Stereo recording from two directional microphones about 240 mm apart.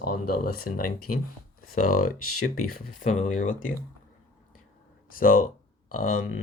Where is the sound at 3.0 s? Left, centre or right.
Left.